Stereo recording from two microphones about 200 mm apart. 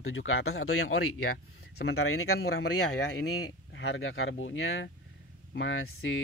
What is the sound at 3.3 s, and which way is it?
Speech, 65° left (ahead or behind).